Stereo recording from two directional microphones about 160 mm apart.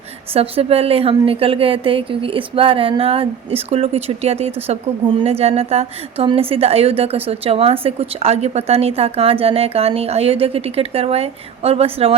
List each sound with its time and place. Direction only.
0.3 s a woman's voice: 40° right (ahead or behind)